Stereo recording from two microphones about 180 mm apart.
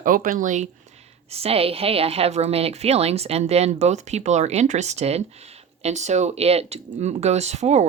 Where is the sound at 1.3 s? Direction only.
35° right (ahead or behind).